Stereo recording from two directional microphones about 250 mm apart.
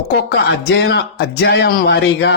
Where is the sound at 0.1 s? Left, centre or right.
Left.